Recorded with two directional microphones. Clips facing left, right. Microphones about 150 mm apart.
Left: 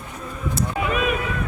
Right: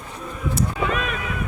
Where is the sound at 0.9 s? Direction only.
5° left (ahead or behind).